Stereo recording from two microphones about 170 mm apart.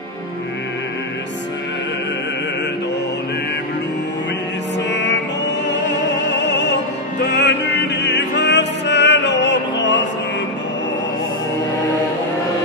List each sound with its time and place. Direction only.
4.9 s music: 90° left
5.7 s opera: 90° left